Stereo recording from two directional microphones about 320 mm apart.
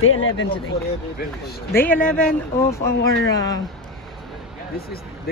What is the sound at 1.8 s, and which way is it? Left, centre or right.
A woman's voice, centre.